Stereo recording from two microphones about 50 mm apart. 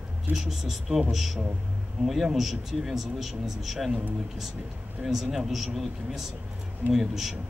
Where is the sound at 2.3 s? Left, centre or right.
Centre.